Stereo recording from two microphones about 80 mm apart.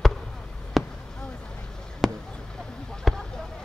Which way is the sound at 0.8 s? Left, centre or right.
Centre.